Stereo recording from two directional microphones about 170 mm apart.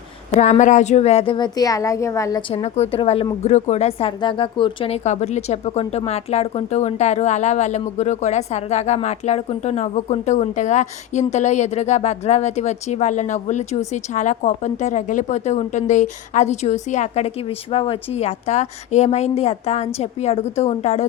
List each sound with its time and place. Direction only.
0.3 s speech: 45° left (ahead or behind); by 2.4 s 20° left (ahead or behind)
2.5 s speech: 35° left (ahead or behind)
5.0 s speech: 45° left (ahead or behind)